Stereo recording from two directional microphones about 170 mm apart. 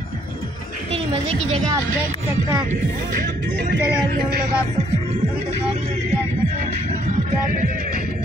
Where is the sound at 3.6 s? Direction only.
60° right (ahead or behind).